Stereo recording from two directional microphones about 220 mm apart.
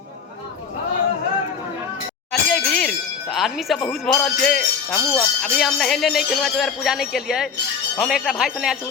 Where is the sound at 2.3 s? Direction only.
Centre (ahead or behind).